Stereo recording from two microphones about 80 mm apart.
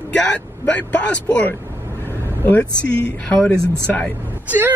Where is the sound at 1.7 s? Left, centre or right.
Right.